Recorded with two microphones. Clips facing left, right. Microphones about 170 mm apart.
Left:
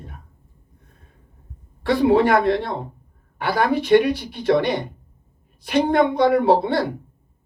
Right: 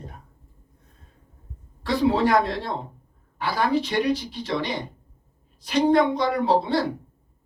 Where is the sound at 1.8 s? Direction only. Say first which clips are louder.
Left 5 dB; 55° left (ahead or behind).